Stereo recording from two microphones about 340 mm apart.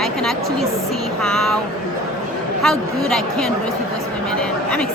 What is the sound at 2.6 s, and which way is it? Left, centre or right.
Speech, centre.